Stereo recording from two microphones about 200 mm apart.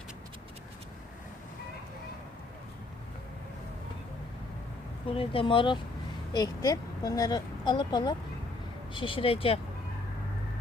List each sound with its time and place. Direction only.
5.0 s speech: 25° left (ahead or behind)